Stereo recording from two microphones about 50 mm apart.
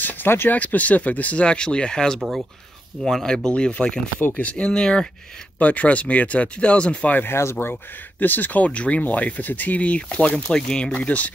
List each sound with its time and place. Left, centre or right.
0.0 s a sound: left
0.5 s speech: left; by 2.1 s centre
3.0 s speech: centre
3.4 s speech: centre
4.2 s speech: left; by 5.0 s centre
5.6 s speech: left
7.2 s speech: left
7.7 s speech: left